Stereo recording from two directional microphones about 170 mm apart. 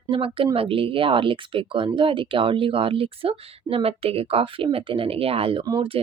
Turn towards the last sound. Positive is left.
turn(degrees=-25)  # may be behind; listen again after turning